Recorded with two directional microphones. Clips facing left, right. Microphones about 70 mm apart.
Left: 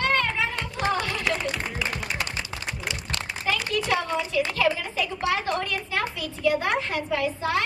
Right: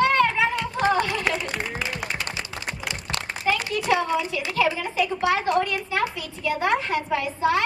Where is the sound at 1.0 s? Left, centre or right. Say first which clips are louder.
Right 2 dB; right.